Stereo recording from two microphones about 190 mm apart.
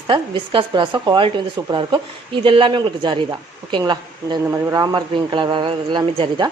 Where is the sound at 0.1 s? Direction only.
25° right (ahead or behind).